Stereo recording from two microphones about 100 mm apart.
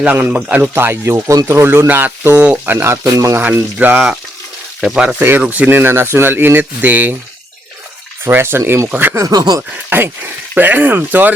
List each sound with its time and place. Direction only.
0.0 s speech: 15° right (ahead or behind); by 3.3 s 30° right (ahead or behind)
3.3 s speech: 20° right (ahead or behind); by 5.0 s centre (ahead or behind)
5.4 s speech: 15° right (ahead or behind)
8.2 s speech: 25° right (ahead or behind)
9.1 s speech: 35° right (ahead or behind)
9.9 s speech: 20° right (ahead or behind)